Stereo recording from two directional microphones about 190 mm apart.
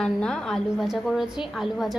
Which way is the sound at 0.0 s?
5° left (ahead or behind).